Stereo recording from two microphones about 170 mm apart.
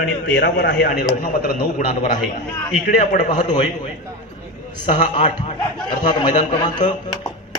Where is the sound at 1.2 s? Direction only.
60° left (ahead or behind).